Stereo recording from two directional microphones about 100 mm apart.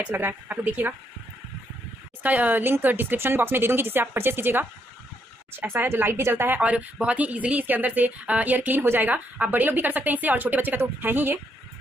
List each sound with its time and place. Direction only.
0.0 s a woman's voice: 20° right (ahead or behind)
2.2 s a woman's voice: 15° right (ahead or behind)